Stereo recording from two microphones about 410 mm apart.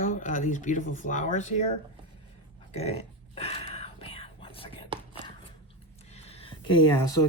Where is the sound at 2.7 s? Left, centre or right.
Centre.